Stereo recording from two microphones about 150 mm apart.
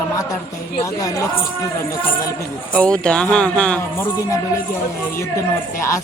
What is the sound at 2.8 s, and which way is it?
Music, 5° left (ahead or behind).